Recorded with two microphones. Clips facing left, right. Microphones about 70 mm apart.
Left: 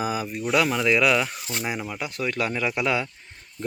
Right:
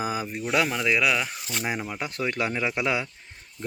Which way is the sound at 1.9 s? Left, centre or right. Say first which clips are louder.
Left 1 dB; right.